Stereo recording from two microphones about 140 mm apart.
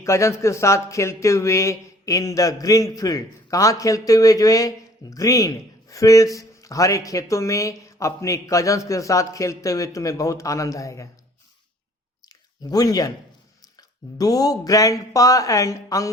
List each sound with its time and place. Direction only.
0.0 s a man's voice: 20° left (ahead or behind)
12.2 s a sound: 25° left (ahead or behind)
13.7 s a man's voice: 25° left (ahead or behind)